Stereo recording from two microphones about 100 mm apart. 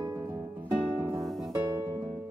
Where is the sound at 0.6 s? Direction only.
25° right (ahead or behind).